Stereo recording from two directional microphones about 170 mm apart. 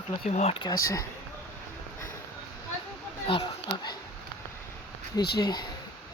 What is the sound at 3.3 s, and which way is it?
Speech, 25° left (ahead or behind).